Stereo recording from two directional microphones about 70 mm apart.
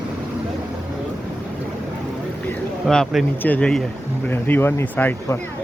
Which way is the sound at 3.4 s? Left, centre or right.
Left.